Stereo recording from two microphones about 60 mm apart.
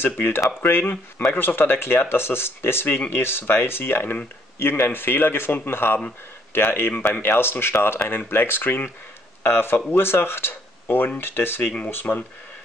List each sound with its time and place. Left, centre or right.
0.0 s speech: left